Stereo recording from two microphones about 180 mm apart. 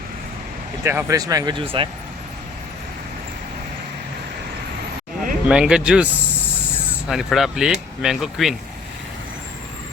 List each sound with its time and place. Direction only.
0.9 s speech: 15° right (ahead or behind)
5.5 s speech: 5° right (ahead or behind)
7.1 s speech: centre (ahead or behind)